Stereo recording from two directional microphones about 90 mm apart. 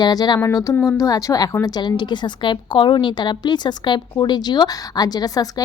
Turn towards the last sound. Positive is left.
turn(degrees=45)  # may be behind; listen again after turning